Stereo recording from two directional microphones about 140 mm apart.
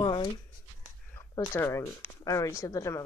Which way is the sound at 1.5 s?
20° left (ahead or behind).